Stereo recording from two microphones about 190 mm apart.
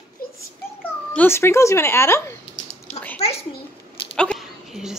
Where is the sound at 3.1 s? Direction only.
35° left (ahead or behind).